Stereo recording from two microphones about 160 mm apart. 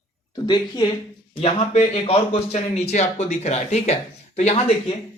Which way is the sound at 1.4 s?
40° left (ahead or behind).